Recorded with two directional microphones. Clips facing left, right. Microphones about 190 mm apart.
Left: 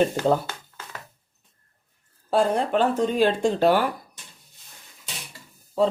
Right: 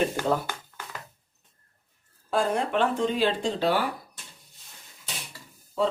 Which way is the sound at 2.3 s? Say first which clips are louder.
Left 4 dB; 35° left (ahead or behind).